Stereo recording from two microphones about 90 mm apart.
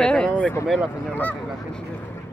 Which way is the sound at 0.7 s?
5° right (ahead or behind).